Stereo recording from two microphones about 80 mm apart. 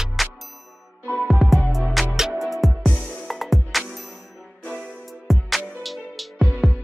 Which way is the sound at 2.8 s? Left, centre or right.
Centre.